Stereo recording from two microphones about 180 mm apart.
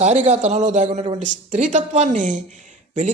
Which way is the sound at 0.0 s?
40° right (ahead or behind).